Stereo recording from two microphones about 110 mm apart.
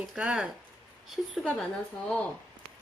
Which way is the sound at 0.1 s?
5° right (ahead or behind).